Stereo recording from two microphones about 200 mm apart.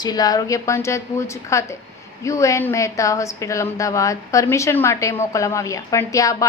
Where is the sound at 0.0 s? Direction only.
20° left (ahead or behind).